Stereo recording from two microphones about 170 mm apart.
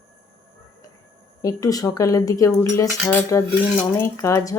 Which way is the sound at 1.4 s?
20° left (ahead or behind).